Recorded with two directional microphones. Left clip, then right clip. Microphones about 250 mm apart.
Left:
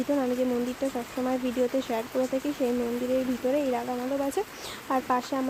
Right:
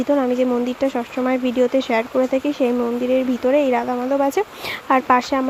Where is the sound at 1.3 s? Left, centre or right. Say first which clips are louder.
Right 9 dB; centre.